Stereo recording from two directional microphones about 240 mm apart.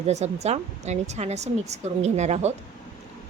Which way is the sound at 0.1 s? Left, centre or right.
Right.